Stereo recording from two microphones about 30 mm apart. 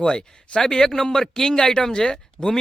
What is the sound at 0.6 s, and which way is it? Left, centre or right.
Speech, centre.